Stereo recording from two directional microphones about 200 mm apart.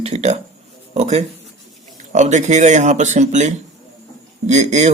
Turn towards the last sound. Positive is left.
turn(degrees=-35)  # may be behind; listen again after turning